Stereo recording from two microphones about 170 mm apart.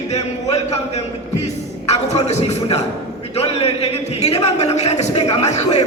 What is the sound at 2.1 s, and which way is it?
Speech, 40° left (ahead or behind).